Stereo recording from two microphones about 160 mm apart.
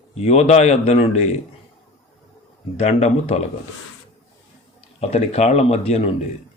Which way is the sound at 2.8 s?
40° left (ahead or behind).